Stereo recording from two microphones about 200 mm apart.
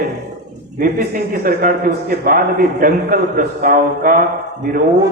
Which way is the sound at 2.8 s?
45° right (ahead or behind).